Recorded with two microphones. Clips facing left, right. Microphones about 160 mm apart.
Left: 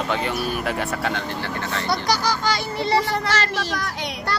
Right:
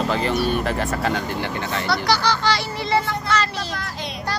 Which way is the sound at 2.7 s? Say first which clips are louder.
Left 1 dB; 80° left.